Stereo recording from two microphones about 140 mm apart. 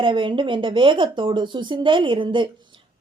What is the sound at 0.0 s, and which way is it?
A woman's voice, 35° right (ahead or behind).